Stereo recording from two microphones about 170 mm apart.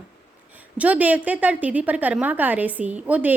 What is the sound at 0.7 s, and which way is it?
A woman's voice, 10° right (ahead or behind).